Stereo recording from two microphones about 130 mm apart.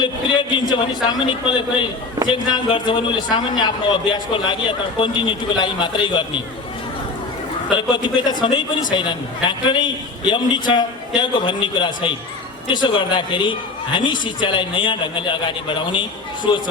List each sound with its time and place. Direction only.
0.0 s a man's voice: 40° left (ahead or behind)
7.7 s a man's voice: 35° left (ahead or behind)